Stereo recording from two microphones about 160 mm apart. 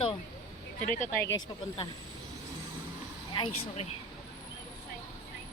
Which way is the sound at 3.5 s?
45° left (ahead or behind).